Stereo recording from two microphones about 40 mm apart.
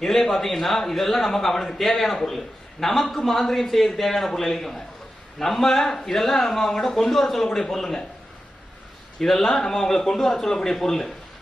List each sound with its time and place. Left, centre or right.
0.0 s a man's voice: centre
7.4 s speech: centre
9.2 s speech: centre